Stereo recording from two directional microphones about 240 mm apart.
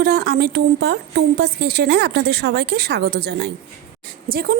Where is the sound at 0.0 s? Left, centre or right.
Right.